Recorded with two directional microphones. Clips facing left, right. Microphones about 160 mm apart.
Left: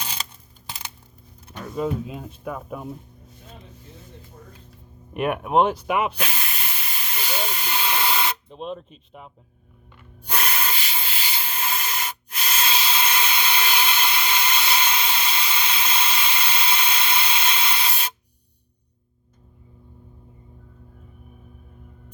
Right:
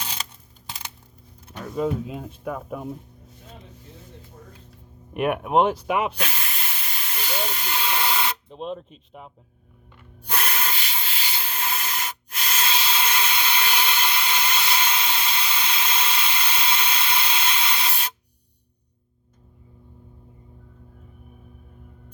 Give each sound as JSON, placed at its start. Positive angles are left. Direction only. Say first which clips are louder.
{"t": 0.0, "sound": "a sound", "louder": "left 1 dB", "side_deg": 10}
{"t": 1.5, "sound": "speech", "louder": "right 1 dB", "side_deg": -45}
{"t": 5.1, "sound": "speech", "louder": "even", "side_deg": -20}
{"t": 5.7, "sound": "speech", "louder": "left 1 dB", "side_deg": -35}
{"t": 6.1, "sound": "hiss", "louder": "even", "side_deg": 5}
{"t": 8.4, "sound": "speech", "louder": "right 1 dB", "side_deg": -35}
{"t": 10.2, "sound": "rub", "louder": "left 1 dB", "side_deg": 5}